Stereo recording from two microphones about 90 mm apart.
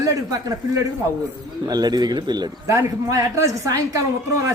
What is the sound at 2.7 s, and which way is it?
A man's voice, 30° right (ahead or behind).